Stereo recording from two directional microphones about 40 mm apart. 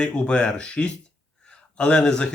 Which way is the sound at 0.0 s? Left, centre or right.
Left.